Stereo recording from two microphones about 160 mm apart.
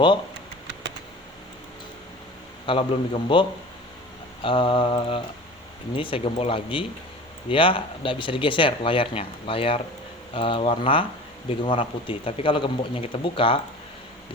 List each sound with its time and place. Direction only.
2.6 s speech: 35° left (ahead or behind)
4.4 s speech: 30° left (ahead or behind)